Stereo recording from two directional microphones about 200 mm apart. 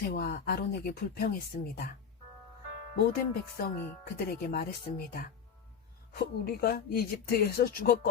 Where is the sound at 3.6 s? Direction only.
45° left (ahead or behind).